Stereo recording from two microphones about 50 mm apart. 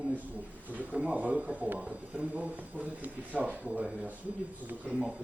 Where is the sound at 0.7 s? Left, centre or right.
Right.